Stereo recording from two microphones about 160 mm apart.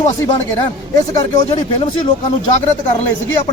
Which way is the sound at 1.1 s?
25° left (ahead or behind).